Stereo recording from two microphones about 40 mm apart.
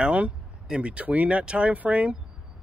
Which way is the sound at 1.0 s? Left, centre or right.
Right.